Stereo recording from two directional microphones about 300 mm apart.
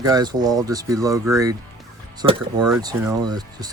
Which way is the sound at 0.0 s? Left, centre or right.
Centre.